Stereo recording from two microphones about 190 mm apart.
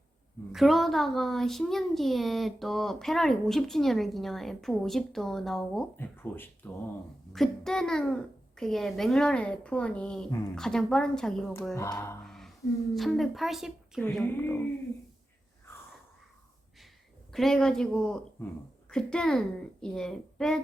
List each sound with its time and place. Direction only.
0.5 s a child's voice: centre (ahead or behind)
11.7 s speech: 15° left (ahead or behind)
12.2 s a sound: centre (ahead or behind)
12.9 s a child's voice: centre (ahead or behind)
17.3 s a child's voice: centre (ahead or behind)